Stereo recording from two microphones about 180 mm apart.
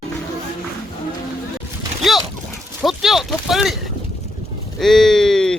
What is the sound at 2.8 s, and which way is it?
Speech, centre (ahead or behind).